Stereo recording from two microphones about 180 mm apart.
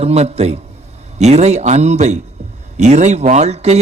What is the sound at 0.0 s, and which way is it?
A man's voice, 35° right (ahead or behind).